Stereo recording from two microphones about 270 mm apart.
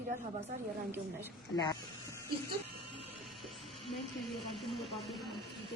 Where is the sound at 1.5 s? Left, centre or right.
Centre.